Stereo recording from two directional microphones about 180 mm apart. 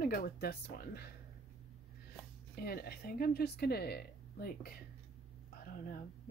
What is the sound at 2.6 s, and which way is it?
Speech, 60° left (ahead or behind).